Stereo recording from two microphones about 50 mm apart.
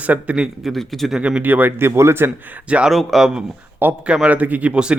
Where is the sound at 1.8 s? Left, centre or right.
Right.